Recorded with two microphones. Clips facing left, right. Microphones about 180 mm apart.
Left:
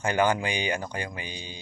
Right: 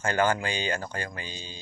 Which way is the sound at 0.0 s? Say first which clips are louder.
Left 1 dB; 15° left (ahead or behind).